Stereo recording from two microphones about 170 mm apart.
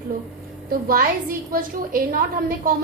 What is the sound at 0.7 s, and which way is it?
A woman's voice, 55° right (ahead or behind).